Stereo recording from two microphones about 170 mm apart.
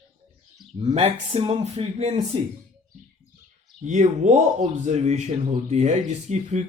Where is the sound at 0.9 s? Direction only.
35° right (ahead or behind).